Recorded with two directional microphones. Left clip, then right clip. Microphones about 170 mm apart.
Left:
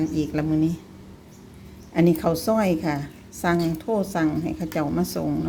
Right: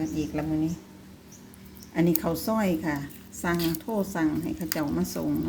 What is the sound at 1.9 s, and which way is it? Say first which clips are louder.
A woman's voice: left 5 dB; 15° left (ahead or behind).